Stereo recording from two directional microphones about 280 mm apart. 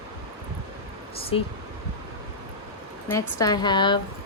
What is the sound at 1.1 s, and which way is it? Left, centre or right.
Speech, centre.